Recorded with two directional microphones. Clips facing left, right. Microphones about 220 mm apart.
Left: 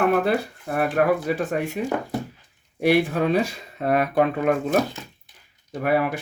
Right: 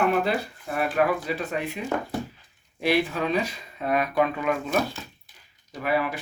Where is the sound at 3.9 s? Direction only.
60° left (ahead or behind).